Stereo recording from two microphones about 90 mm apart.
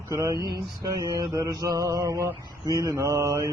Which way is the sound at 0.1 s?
35° right (ahead or behind).